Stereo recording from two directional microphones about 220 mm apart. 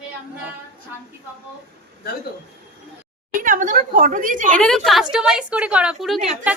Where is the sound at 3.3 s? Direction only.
35° right (ahead or behind).